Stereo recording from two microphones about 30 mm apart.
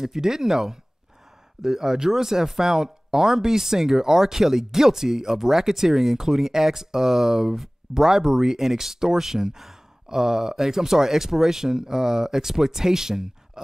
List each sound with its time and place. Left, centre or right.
0.0 s speech: centre